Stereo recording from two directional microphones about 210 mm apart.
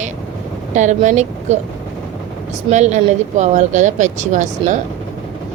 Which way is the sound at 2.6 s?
35° right (ahead or behind).